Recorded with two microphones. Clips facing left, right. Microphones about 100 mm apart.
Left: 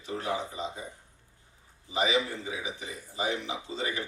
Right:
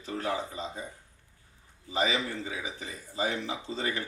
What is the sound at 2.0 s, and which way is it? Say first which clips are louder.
Speech: left 1 dB; 20° left (ahead or behind).